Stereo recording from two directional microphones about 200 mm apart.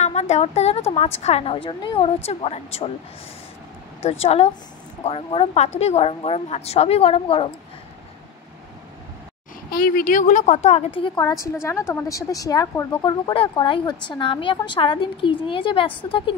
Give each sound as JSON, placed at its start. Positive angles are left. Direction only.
{"t": 0.0, "sound": "a woman's voice", "side_deg": 35}
{"t": 4.0, "sound": "a woman's voice", "side_deg": 30}
{"t": 9.7, "sound": "a woman's voice", "side_deg": 45}
{"t": 11.0, "sound": "speech", "side_deg": 20}